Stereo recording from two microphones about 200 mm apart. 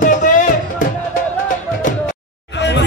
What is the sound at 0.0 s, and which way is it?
Music, 40° left (ahead or behind).